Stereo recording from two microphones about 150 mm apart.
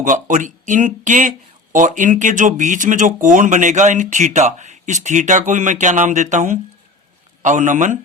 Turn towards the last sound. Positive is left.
turn(degrees=-55)  # may be behind; listen again after turning